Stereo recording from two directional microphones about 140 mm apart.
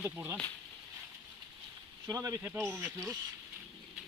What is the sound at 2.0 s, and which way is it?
Speech, 25° right (ahead or behind).